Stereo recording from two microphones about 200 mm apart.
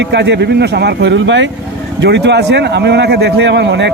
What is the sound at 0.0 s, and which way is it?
A man's voice, 60° right (ahead or behind).